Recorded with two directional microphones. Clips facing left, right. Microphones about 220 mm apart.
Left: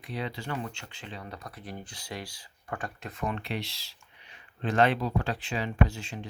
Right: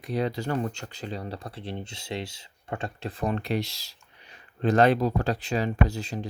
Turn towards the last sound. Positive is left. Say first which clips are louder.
# right 2 dB
turn(degrees=-40)  # may be behind; listen again after turning